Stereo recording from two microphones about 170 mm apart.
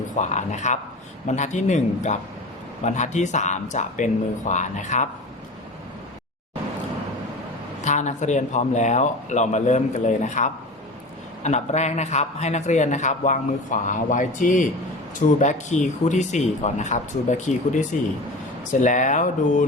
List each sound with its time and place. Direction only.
0.2 s a man's voice: 45° left (ahead or behind)
7.8 s a man's voice: 45° left (ahead or behind)